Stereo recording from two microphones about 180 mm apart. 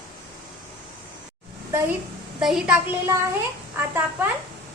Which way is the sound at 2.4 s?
5° right (ahead or behind).